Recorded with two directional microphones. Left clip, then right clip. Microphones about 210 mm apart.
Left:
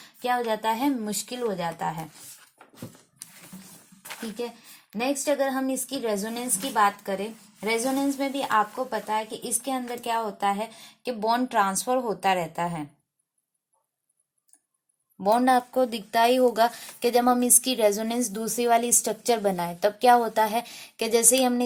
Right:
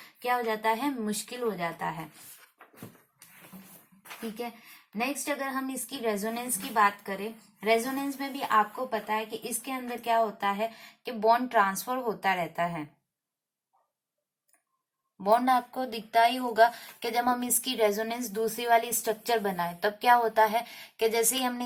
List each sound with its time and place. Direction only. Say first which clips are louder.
0.2 s a woman's voice: left 3 dB; 50° left (ahead or behind)
4.9 s a woman's voice: left 6 dB; 50° left (ahead or behind)
15.2 s a woman's voice: left 3 dB; 50° left (ahead or behind)